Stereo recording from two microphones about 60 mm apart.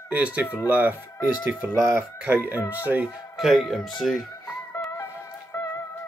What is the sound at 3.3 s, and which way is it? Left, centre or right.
Speech, centre.